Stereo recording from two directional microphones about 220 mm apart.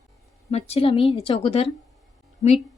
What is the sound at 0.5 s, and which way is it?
A woman's voice, 25° left (ahead or behind).